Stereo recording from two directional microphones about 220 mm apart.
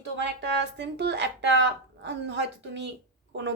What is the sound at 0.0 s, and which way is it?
Speech, 50° right (ahead or behind).